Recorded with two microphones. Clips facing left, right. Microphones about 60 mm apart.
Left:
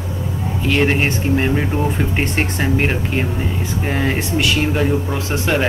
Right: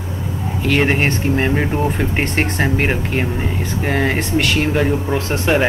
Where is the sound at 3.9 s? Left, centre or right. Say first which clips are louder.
Right 2 dB; right.